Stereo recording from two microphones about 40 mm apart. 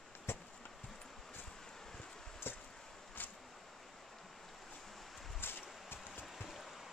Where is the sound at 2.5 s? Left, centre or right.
Left.